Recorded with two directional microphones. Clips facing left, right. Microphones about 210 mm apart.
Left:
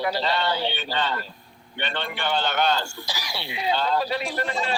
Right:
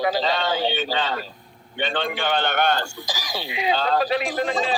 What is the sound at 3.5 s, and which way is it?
Speech, 85° right.